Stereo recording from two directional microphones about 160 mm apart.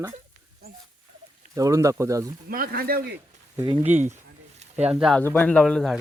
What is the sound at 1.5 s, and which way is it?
Speech, 20° right (ahead or behind).